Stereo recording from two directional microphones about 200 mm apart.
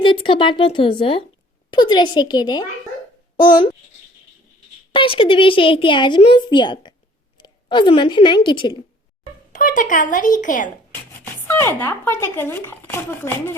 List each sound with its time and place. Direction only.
0.0 s a woman's voice: 25° left (ahead or behind)
4.9 s a woman's voice: 25° left (ahead or behind)
9.5 s a woman's voice: 40° left (ahead or behind)
11.4 s speech: 10° left (ahead or behind)